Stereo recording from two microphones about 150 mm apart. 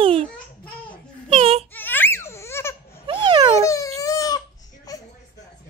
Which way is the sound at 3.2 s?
30° right (ahead or behind).